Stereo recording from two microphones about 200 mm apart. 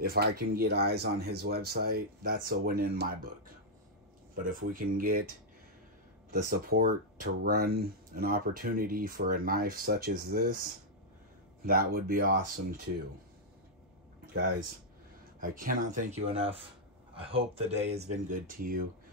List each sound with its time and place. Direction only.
0.0 s speech: 50° right (ahead or behind)
4.4 s speech: 40° right (ahead or behind)
6.3 s speech: 45° right (ahead or behind)
15.4 s speech: 45° right (ahead or behind)
18.1 s speech: 40° right (ahead or behind)